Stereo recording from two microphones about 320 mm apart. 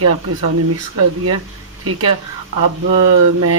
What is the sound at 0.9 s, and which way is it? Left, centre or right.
Speech, right.